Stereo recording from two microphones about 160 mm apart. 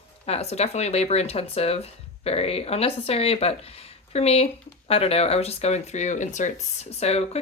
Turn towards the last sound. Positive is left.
turn(degrees=40)  # may be behind; listen again after turning